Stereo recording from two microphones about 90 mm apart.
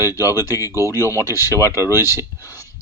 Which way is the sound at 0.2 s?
40° left (ahead or behind).